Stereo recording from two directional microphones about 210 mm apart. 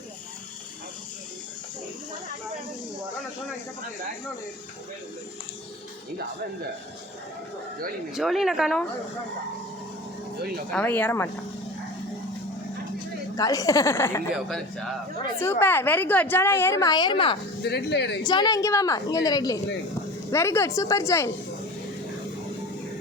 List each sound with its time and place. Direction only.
8.1 s speech: centre (ahead or behind)
10.7 s a woman's voice: 5° left (ahead or behind)
13.3 s a woman's voice: 15° left (ahead or behind)
17.6 s speech: 50° left (ahead or behind)
18.2 s a woman's voice: 20° left (ahead or behind)